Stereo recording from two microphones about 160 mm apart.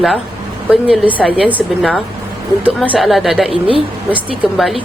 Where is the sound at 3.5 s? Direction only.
35° right (ahead or behind).